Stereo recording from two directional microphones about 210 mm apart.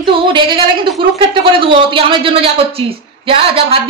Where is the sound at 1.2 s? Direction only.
25° right (ahead or behind).